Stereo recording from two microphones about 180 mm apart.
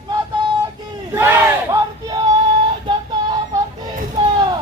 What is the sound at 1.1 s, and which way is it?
Battle cry, 15° right (ahead or behind).